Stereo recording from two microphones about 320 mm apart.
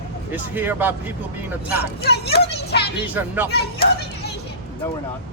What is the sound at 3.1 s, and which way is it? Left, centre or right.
Speech, centre.